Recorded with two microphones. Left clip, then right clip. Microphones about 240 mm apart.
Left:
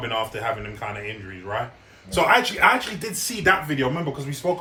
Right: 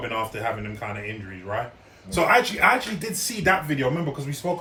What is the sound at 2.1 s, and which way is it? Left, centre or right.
Speech, centre.